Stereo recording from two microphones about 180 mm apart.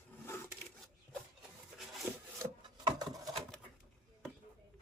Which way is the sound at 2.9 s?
20° right (ahead or behind).